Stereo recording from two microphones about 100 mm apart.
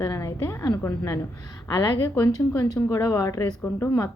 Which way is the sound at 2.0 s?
25° left (ahead or behind).